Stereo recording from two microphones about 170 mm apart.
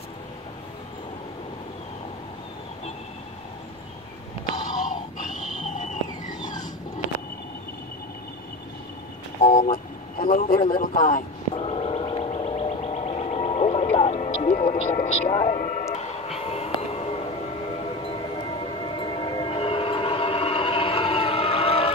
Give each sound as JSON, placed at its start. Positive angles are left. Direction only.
{"t": 5.8, "sound": "a sound", "side_deg": 45}
{"t": 9.4, "sound": "vehicle", "side_deg": 55}
{"t": 10.7, "sound": "a man's voice", "side_deg": 50}
{"t": 11.5, "sound": "music", "side_deg": 35}
{"t": 18.0, "sound": "train", "side_deg": 30}